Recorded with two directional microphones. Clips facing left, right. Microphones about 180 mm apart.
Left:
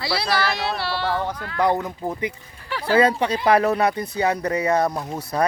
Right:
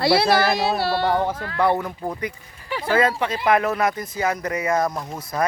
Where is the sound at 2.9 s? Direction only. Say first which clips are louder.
Left 2 dB; 35° left (ahead or behind).